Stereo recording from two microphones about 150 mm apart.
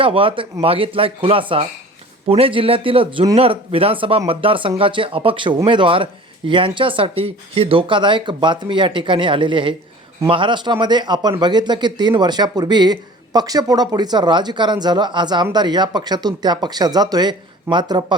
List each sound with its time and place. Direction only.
0.0 s a man's voice: 35° right (ahead or behind)